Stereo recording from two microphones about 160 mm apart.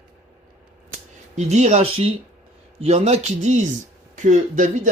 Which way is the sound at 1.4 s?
45° right (ahead or behind).